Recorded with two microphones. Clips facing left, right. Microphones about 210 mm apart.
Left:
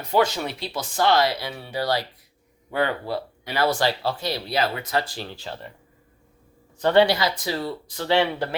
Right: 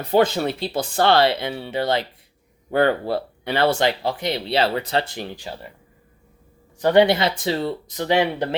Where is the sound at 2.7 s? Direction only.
55° right (ahead or behind).